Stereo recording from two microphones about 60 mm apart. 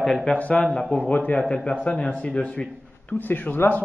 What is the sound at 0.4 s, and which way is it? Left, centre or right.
Speech, left.